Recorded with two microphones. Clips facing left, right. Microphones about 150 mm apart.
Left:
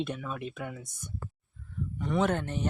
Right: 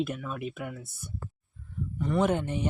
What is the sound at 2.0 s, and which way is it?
Speech, 5° right (ahead or behind).